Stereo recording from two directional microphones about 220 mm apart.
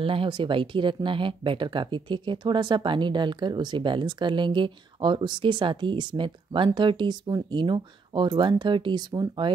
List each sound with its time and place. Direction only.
0.0 s speech: 25° right (ahead or behind)